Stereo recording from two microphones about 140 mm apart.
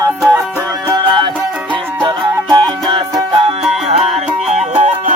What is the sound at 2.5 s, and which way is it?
Music, 35° right (ahead or behind).